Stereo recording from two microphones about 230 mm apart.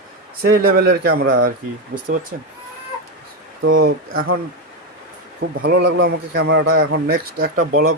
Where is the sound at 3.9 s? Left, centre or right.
Right.